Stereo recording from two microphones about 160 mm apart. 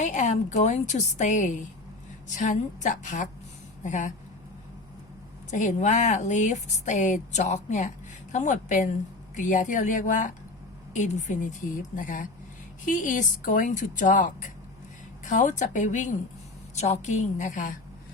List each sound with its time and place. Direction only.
0.0 s speech: 50° left (ahead or behind)
5.5 s speech: 50° left (ahead or behind)